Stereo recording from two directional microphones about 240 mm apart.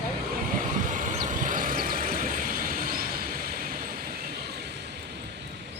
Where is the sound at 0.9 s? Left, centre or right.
Right.